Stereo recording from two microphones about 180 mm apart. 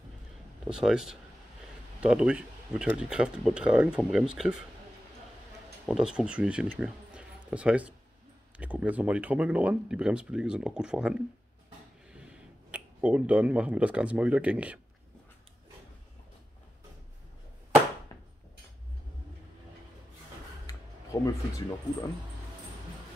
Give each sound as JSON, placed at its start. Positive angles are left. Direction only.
{"t": 0.7, "sound": "speech", "side_deg": -5}
{"t": 5.9, "sound": "speech", "side_deg": -5}
{"t": 20.6, "sound": "a sound", "side_deg": 20}